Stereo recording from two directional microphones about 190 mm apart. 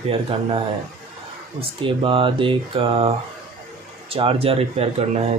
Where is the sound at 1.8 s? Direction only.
25° right (ahead or behind).